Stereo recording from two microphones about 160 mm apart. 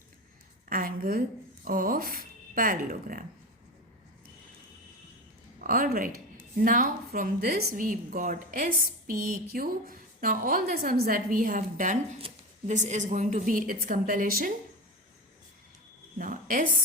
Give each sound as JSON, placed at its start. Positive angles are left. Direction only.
{"t": 0.7, "sound": "a woman's voice", "side_deg": -60}
{"t": 5.5, "sound": "a woman's voice", "side_deg": -65}
{"t": 16.1, "sound": "a sound", "side_deg": -55}